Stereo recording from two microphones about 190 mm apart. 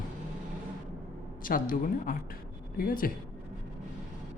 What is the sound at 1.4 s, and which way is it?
Speech, 45° left (ahead or behind).